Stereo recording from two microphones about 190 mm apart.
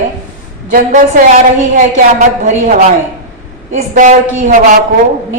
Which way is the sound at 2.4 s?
45° right (ahead or behind).